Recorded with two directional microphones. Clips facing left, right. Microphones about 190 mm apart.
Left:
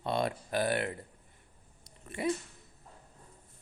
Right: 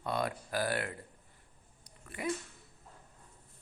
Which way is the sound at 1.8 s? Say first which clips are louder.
Left 5 dB; 25° left (ahead or behind).